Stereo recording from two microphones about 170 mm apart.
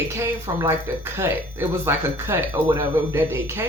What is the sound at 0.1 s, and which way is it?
Speech, 15° right (ahead or behind).